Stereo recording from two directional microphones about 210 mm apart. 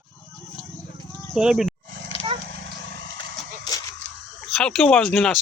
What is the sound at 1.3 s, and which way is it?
Speech, centre (ahead or behind).